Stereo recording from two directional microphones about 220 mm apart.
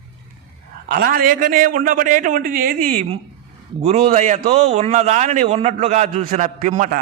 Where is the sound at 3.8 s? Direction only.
30° right (ahead or behind).